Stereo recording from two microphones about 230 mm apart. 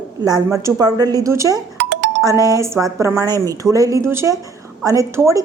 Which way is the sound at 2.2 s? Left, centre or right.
Centre.